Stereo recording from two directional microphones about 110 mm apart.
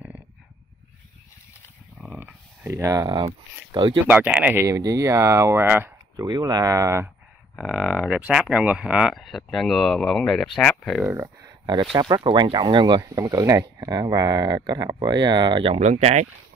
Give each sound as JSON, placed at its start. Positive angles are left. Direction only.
{"t": 2.1, "sound": "a sound", "side_deg": -20}
{"t": 3.2, "sound": "speech", "side_deg": -45}
{"t": 4.1, "sound": "speech", "side_deg": -15}
{"t": 4.6, "sound": "speech", "side_deg": -30}
{"t": 6.1, "sound": "speech", "side_deg": -35}
{"t": 7.6, "sound": "speech", "side_deg": 0}
{"t": 9.1, "sound": "speech", "side_deg": 0}
{"t": 11.1, "sound": "speech", "side_deg": -25}
{"t": 11.6, "sound": "speech", "side_deg": -45}
{"t": 13.0, "sound": "speech", "side_deg": -30}
{"t": 15.7, "sound": "speech", "side_deg": -85}